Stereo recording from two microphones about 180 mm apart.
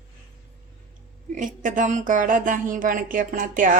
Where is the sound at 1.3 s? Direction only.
45° right (ahead or behind).